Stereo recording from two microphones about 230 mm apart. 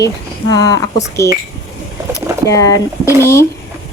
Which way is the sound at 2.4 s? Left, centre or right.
Centre.